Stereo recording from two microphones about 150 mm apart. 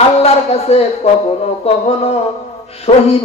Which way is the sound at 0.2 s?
45° left (ahead or behind).